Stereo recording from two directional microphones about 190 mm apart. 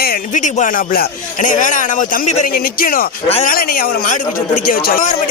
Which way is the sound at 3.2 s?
30° left (ahead or behind).